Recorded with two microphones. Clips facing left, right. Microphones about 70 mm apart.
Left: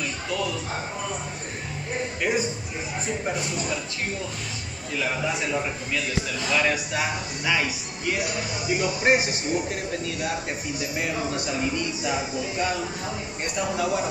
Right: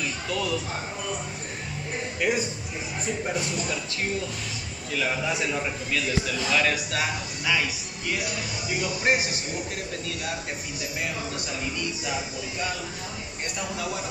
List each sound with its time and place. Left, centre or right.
2.3 s a man's voice: centre
6.4 s speech: centre